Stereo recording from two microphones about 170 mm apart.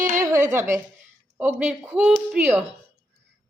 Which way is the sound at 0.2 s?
20° right (ahead or behind).